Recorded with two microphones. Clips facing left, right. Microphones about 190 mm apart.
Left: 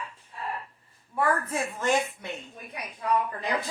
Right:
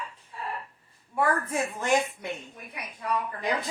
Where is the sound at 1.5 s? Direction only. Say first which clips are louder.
Right 1 dB; 10° right (ahead or behind).